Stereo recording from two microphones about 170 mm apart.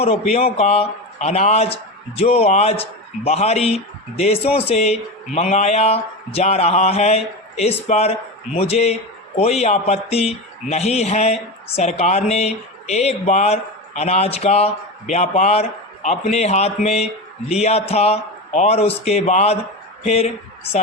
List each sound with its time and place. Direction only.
0.0 s speech: 35° left (ahead or behind)